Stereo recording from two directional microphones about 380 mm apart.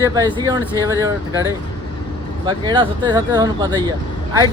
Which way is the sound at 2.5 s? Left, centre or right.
Centre.